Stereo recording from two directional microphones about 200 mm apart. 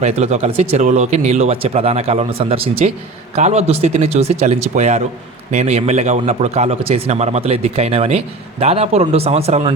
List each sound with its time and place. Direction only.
0.0 s a man's voice: 30° right (ahead or behind)